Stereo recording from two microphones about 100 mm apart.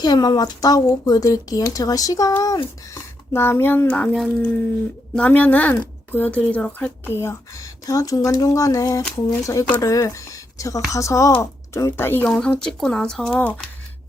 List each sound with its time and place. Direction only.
0.0 s speech: 45° left (ahead or behind)
2.9 s speech: 25° left (ahead or behind)
3.8 s speech: 10° left (ahead or behind)
12.4 s speech: 10° left (ahead or behind)